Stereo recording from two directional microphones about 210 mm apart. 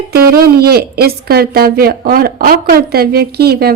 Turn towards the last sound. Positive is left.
turn(degrees=-45)  # may be behind; listen again after turning